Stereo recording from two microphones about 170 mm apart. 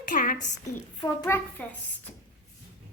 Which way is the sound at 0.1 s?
55° left (ahead or behind).